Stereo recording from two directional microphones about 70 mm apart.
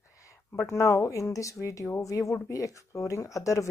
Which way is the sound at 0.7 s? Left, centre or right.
Left.